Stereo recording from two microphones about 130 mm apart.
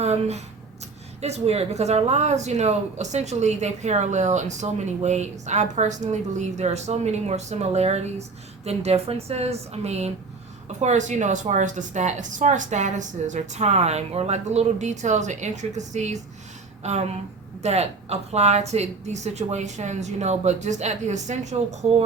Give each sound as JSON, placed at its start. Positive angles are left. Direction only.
{"t": 0.0, "sound": "speech", "side_deg": -55}